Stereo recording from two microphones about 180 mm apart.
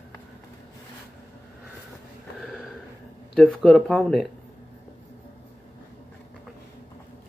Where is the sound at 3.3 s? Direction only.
Centre (ahead or behind).